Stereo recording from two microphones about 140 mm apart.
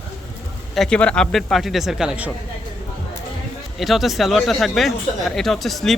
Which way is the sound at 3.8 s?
Centre (ahead or behind).